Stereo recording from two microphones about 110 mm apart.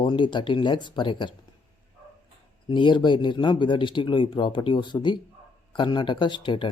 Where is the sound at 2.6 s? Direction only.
45° left (ahead or behind).